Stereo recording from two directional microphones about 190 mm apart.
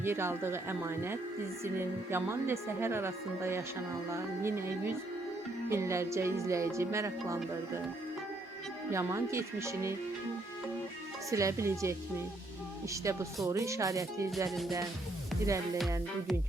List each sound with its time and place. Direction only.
0.0 s speech: 10° right (ahead or behind)
8.9 s speech: 15° right (ahead or behind)
11.3 s speech: 15° right (ahead or behind)
15.4 s speech: 15° right (ahead or behind)